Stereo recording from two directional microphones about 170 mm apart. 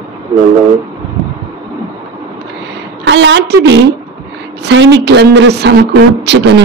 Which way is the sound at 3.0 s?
90° right.